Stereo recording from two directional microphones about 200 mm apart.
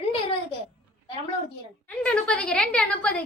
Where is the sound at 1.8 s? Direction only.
5° left (ahead or behind).